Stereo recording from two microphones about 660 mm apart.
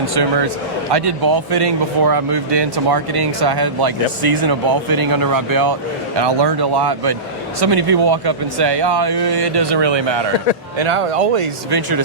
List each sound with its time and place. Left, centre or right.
0.1 s speech: right
11.7 s speech: right